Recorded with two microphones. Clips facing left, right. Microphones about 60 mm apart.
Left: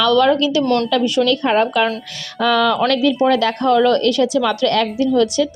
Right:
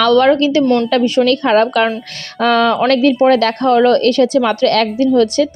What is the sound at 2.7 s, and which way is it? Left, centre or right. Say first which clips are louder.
Speech: right 4 dB; right.